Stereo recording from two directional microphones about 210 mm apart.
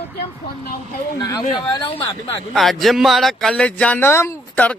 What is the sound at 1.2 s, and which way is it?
Speech, 20° left (ahead or behind).